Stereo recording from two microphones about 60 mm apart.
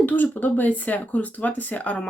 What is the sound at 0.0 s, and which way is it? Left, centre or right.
Speech, left.